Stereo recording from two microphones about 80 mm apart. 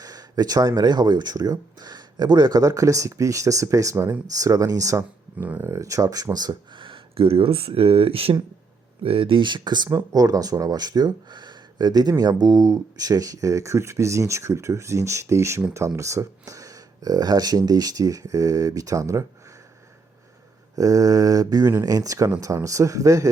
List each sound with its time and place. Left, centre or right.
0.0 s speech: right
5.4 s speech: right
5.7 s speech: right
8.3 s speech: right
9.2 s speech: right
9.9 s speech: right
20.7 s speech: right